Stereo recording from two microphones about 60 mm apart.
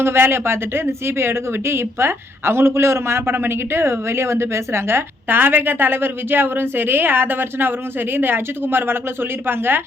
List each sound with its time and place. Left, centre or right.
0.0 s speech: right